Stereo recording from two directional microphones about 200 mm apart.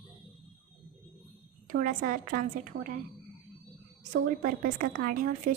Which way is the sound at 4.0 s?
45° right (ahead or behind).